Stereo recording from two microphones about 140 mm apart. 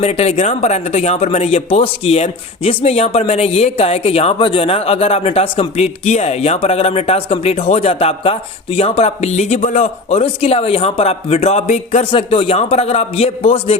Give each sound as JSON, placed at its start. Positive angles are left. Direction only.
{"t": 0.0, "sound": "speech", "side_deg": 50}
{"t": 12.1, "sound": "speech", "side_deg": 40}